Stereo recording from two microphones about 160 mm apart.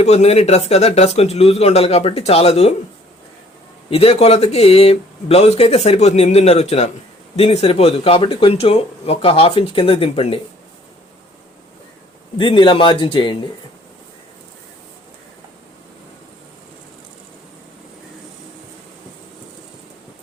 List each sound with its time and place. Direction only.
0.0 s speech: 40° left (ahead or behind)
3.8 s speech: 35° left (ahead or behind)
12.4 s speech: 30° left (ahead or behind)